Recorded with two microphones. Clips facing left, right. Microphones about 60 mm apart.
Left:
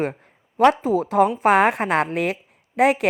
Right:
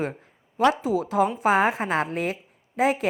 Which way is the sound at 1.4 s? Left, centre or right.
Left.